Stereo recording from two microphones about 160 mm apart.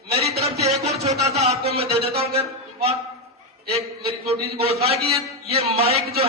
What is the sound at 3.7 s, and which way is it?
A man's voice, 40° right (ahead or behind).